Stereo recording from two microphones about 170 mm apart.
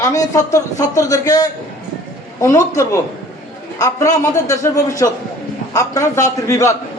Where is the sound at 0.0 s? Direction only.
20° left (ahead or behind).